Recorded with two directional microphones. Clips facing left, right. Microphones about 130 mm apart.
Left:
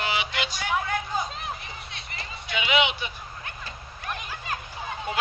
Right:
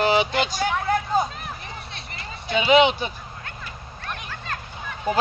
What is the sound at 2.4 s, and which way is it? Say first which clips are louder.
Speech: right 8 dB; 35° right (ahead or behind).